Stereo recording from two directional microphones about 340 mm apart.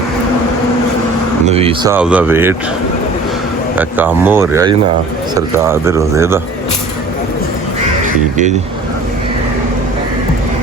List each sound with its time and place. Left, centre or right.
1.5 s speech: centre
3.8 s speech: centre
8.0 s speech: right